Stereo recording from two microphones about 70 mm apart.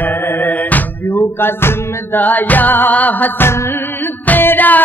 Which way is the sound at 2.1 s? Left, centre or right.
Left.